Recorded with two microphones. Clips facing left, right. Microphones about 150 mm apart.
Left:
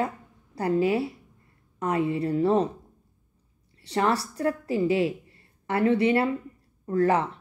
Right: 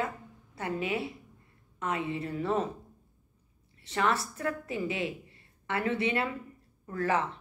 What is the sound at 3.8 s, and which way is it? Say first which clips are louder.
A woman's voice: left 4 dB; 35° left (ahead or behind).